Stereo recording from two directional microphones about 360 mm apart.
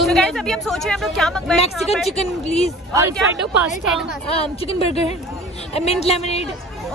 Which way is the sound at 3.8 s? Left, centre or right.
Centre.